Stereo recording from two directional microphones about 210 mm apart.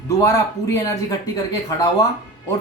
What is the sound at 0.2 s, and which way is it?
Speech, 15° left (ahead or behind).